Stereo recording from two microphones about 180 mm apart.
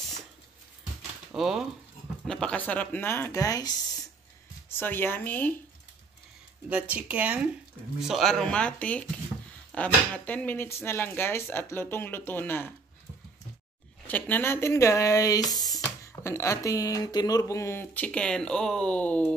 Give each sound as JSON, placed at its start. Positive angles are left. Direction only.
{"t": 1.3, "sound": "speech", "side_deg": 0}
{"t": 6.7, "sound": "speech", "side_deg": -5}
{"t": 14.0, "sound": "speech", "side_deg": 10}